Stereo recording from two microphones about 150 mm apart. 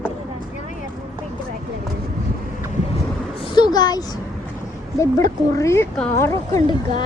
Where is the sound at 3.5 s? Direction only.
30° left (ahead or behind).